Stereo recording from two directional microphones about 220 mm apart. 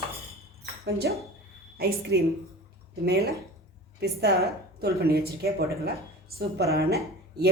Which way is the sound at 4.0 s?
50° right (ahead or behind).